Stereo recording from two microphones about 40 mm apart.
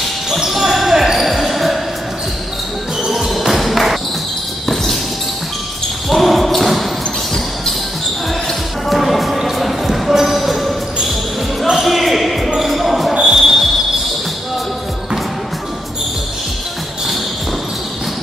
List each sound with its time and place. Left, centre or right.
0.4 s basketball bounce: centre
3.0 s music: centre
3.3 s music: centre
6.0 s basketball bounce: centre
8.8 s music: centre
11.7 s basketball bounce: centre
13.3 s a sound: centre